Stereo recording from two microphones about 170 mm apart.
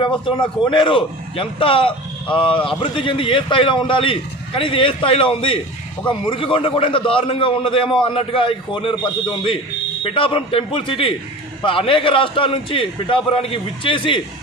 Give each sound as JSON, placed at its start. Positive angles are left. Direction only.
{"t": 0.2, "sound": "a man's voice", "side_deg": 30}